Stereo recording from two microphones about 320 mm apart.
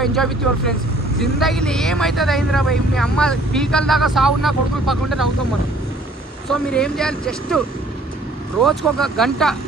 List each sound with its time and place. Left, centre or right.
0.0 s speech: centre
6.7 s speech: centre
8.6 s speech: centre